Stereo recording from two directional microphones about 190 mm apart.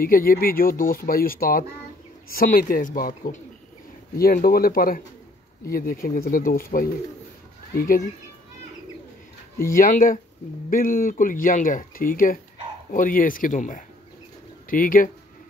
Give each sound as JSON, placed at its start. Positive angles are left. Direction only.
{"t": 0.0, "sound": "speech", "side_deg": 50}
{"t": 9.7, "sound": "speech", "side_deg": 45}